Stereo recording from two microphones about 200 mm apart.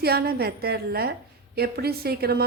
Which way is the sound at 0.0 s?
50° right (ahead or behind).